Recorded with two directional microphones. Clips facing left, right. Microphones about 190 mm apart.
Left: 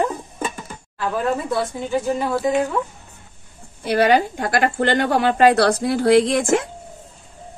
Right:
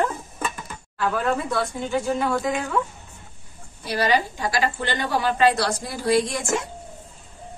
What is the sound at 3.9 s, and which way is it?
A woman's voice, 60° left (ahead or behind).